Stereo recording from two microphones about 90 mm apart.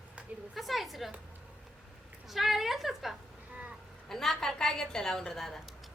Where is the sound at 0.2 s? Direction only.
15° right (ahead or behind).